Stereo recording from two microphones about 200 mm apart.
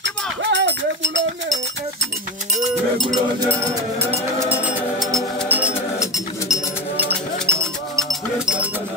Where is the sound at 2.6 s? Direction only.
20° right (ahead or behind); by 5.5 s centre (ahead or behind).